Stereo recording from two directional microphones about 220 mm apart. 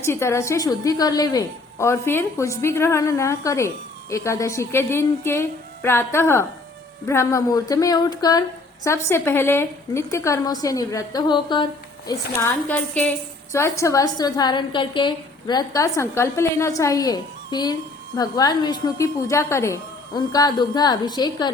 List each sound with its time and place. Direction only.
0.0 s a woman's voice: 10° left (ahead or behind)